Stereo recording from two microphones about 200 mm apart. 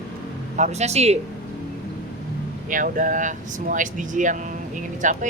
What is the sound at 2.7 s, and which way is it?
A man's voice, 40° right (ahead or behind).